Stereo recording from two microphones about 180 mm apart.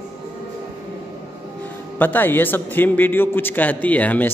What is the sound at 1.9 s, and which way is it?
A man's voice, 10° left (ahead or behind).